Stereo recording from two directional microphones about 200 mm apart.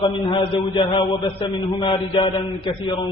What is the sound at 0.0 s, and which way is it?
A man's voice, 25° left (ahead or behind).